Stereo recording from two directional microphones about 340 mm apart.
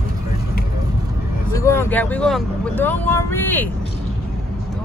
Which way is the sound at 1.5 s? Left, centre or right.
Centre.